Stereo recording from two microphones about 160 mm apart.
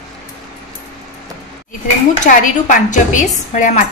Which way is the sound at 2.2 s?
50° left (ahead or behind).